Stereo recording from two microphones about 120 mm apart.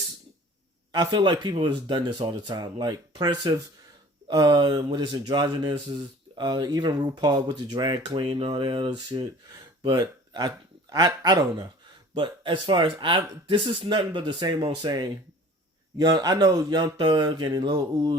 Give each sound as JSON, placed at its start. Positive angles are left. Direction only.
{"t": 0.9, "sound": "speech", "side_deg": -40}